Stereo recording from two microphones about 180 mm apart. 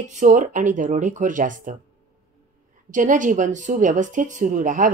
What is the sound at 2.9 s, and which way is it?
Speech, 45° right (ahead or behind).